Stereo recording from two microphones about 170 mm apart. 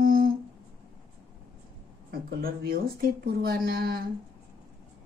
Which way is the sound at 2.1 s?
65° right (ahead or behind).